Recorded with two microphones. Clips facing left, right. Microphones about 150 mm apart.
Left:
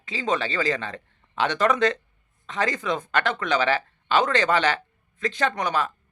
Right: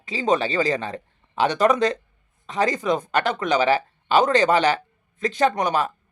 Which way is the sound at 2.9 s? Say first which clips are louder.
Right 3 dB; 20° right (ahead or behind).